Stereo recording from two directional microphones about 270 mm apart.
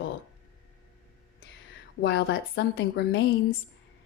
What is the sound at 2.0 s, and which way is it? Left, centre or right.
A woman's voice, left.